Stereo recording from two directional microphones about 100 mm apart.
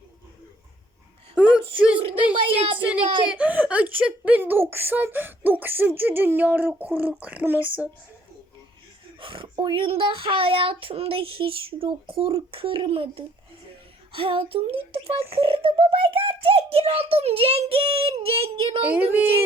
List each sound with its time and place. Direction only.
1.4 s whimper: 10° right (ahead or behind)
2.3 s speech: 60° right (ahead or behind)
3.2 s speech: 15° right (ahead or behind)
9.2 s a child's voice: 60° right (ahead or behind); by 18.8 s 75° right (ahead or behind)
18.9 s speech: 15° right (ahead or behind)